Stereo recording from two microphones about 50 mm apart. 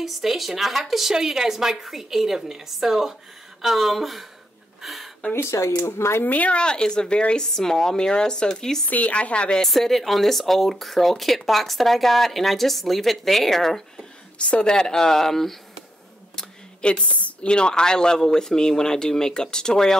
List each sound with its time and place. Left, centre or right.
0.0 s speech: centre
4.8 s a sound: centre
5.3 s speech: left
6.2 s speech: left
6.5 s speech: centre
8.9 s speech: left
9.6 s speech: centre
14.4 s speech: centre
16.3 s speech: centre